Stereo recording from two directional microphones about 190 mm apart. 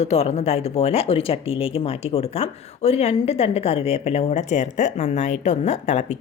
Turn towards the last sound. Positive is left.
turn(degrees=40)  # may be behind; listen again after turning